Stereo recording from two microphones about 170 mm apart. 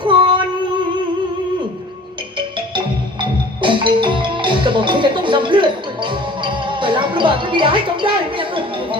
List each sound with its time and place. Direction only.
0.0 s female singing: 30° right (ahead or behind)
2.6 s music: 30° right (ahead or behind)
8.4 s speech: 30° right (ahead or behind)